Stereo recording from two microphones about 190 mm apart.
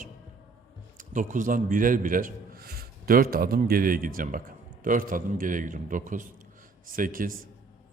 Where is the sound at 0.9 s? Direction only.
45° right (ahead or behind).